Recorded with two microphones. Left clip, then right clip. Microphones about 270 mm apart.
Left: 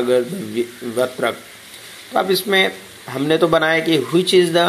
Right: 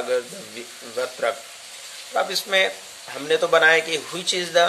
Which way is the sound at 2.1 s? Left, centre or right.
Centre.